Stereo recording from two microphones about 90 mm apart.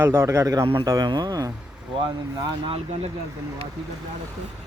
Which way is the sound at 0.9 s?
50° right (ahead or behind).